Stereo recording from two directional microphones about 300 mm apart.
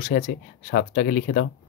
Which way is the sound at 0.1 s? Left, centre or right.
Left.